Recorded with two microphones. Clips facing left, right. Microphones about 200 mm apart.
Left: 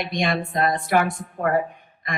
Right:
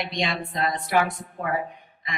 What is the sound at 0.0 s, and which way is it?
A woman's voice, 50° left (ahead or behind).